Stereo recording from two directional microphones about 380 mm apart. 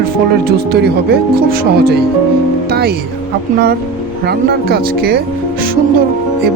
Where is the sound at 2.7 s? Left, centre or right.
Right.